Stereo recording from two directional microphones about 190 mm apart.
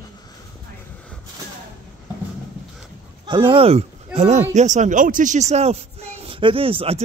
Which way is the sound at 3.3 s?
25° right (ahead or behind).